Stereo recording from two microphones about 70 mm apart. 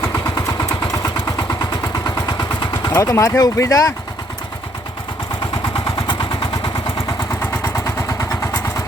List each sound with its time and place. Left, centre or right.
0.3 s vehicle: left
3.0 s speech: left
7.6 s vehicle: left